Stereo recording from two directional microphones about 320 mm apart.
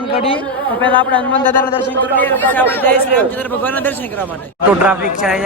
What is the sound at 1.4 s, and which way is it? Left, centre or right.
Speech, centre.